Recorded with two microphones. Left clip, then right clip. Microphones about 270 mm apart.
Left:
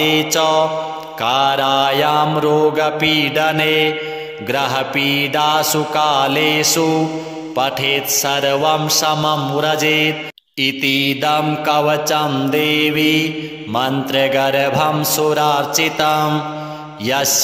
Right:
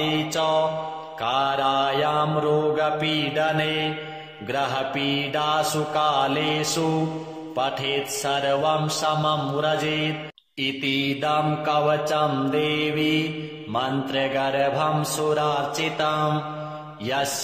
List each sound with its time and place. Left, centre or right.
0.0 s mantra: left